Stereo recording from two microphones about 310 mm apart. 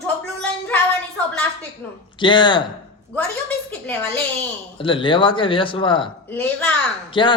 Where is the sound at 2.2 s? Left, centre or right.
Centre.